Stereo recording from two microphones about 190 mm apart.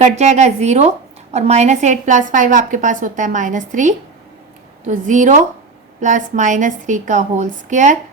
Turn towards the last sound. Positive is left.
turn(degrees=-40)  # may be behind; listen again after turning